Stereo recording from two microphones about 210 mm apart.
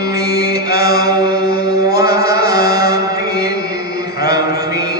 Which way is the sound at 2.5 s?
45° left (ahead or behind).